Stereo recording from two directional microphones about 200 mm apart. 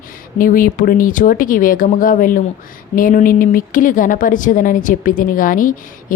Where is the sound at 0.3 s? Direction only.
45° left (ahead or behind).